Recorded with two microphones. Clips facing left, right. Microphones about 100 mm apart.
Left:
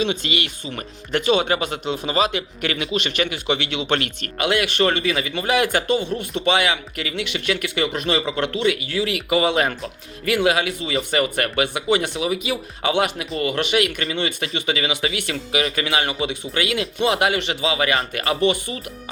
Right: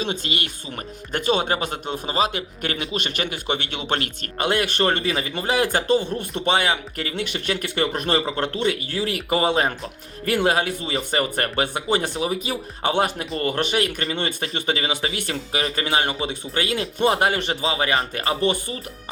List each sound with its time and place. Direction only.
0.0 s speech: 40° right (ahead or behind)